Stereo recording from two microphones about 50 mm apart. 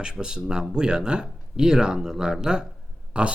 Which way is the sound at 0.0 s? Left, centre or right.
Centre.